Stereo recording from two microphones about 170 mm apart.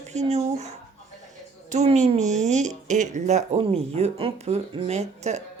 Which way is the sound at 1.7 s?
45° right (ahead or behind).